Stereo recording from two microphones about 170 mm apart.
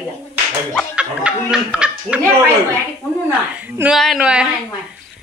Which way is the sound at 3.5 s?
10° right (ahead or behind).